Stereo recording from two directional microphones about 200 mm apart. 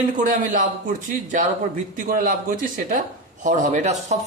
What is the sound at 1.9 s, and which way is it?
Speech, 45° right (ahead or behind).